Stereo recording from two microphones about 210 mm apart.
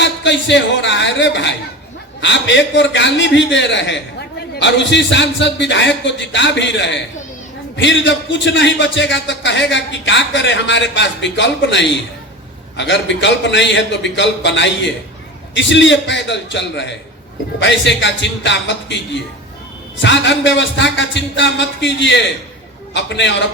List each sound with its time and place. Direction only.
0.0 s a man's voice: 60° left (ahead or behind)